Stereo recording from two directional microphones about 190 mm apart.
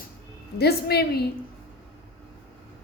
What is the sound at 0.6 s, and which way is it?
Speech, 55° left (ahead or behind).